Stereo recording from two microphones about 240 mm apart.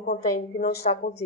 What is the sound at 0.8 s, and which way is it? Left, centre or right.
Speech, left.